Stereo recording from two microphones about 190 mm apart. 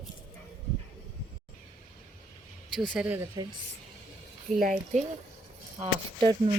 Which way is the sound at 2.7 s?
Centre (ahead or behind).